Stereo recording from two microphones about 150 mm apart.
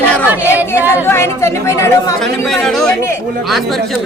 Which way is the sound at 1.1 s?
15° left (ahead or behind).